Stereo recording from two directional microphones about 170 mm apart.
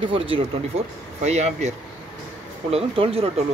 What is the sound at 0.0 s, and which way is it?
Speech, 30° right (ahead or behind).